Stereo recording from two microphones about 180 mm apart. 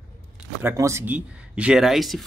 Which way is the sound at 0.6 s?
15° right (ahead or behind).